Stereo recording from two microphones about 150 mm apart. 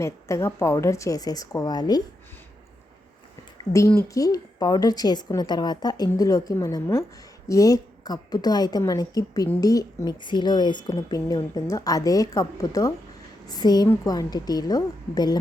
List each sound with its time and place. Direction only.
0.0 s a woman's voice: 20° left (ahead or behind)
3.6 s a woman's voice: 20° left (ahead or behind)